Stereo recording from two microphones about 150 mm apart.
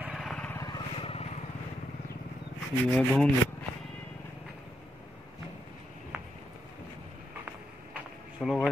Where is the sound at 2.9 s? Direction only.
5° left (ahead or behind).